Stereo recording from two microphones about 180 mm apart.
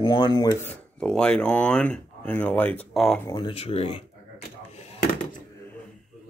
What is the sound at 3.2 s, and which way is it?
Speech, 25° left (ahead or behind).